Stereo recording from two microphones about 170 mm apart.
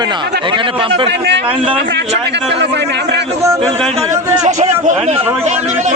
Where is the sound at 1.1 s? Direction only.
90° right.